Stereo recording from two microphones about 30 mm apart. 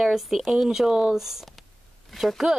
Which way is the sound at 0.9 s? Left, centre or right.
Right.